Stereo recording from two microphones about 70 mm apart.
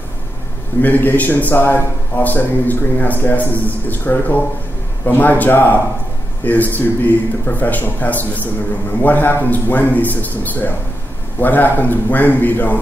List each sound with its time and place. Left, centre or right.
0.8 s a man's voice: left